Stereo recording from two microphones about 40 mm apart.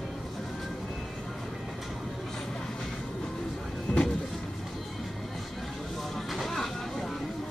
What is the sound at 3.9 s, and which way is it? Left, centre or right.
Vehicle, left.